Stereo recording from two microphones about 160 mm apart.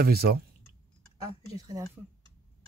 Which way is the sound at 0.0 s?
75° right (ahead or behind).